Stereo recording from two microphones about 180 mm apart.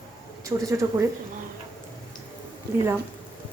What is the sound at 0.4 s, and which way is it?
Speech, 15° right (ahead or behind).